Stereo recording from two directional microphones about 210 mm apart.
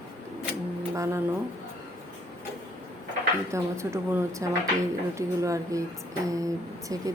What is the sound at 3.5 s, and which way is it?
A woman's voice, 15° right (ahead or behind).